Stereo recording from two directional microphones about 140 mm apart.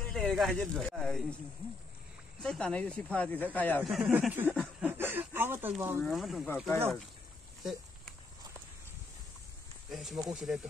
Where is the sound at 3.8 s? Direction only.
5° right (ahead or behind).